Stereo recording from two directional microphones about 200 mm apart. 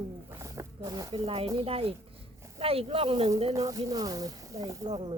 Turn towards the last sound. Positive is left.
turn(degrees=-25)  # may be behind; listen again after turning